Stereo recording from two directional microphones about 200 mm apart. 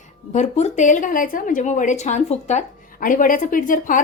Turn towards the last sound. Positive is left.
turn(degrees=40)  # may be behind; listen again after turning